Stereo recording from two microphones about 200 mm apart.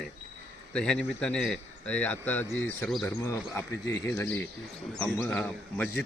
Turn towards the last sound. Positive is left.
turn(degrees=5)  # may be behind; listen again after turning